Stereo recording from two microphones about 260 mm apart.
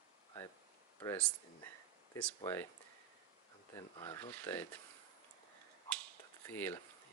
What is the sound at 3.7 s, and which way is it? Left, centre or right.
Speech, centre.